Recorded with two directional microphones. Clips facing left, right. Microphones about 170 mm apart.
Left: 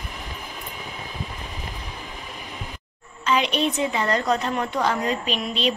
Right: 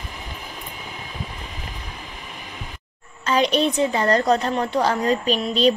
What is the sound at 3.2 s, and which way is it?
A woman's voice, 40° right (ahead or behind).